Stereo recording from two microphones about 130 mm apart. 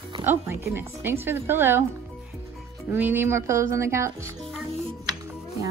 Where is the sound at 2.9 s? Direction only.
15° right (ahead or behind).